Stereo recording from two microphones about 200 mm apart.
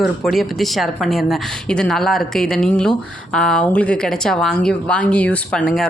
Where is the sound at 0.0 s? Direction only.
Centre (ahead or behind).